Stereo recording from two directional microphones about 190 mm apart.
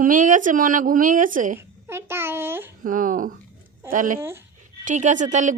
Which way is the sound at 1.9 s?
10° right (ahead or behind).